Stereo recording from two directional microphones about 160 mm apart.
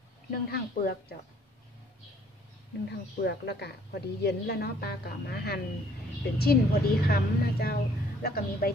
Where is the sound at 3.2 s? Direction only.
90° left; by 8.7 s 70° left (ahead or behind).